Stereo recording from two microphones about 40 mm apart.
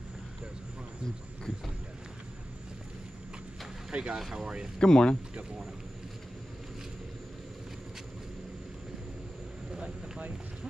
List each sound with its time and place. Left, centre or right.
3.9 s speech: right
4.7 s speech: centre
9.8 s a sound: right